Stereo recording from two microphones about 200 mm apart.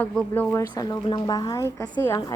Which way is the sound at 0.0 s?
5° left (ahead or behind).